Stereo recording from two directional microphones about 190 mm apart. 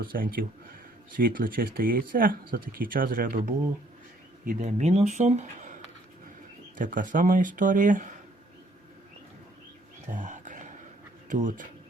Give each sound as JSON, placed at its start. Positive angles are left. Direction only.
{"t": 0.0, "sound": "speech", "side_deg": -50}
{"t": 4.4, "sound": "speech", "side_deg": -35}
{"t": 6.7, "sound": "speech", "side_deg": -45}
{"t": 10.1, "sound": "whispering", "side_deg": -40}
{"t": 11.3, "sound": "speech", "side_deg": -45}